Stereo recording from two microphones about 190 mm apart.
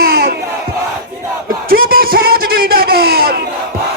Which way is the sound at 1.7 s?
50° right (ahead or behind).